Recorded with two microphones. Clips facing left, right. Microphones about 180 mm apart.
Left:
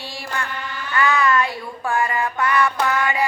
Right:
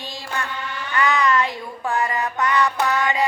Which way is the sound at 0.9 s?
20° right (ahead or behind).